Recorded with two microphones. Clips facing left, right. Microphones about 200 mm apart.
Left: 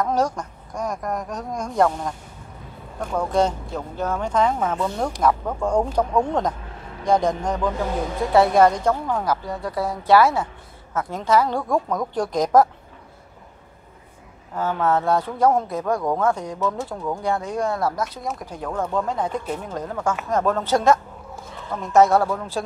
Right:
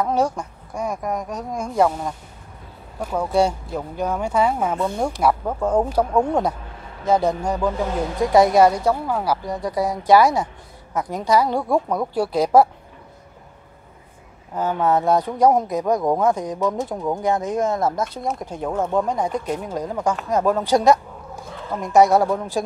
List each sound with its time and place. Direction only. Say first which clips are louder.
0.0 s a woman's voice: right 1 dB; 10° right (ahead or behind)
14.5 s a woman's voice: right 2 dB; 20° right (ahead or behind)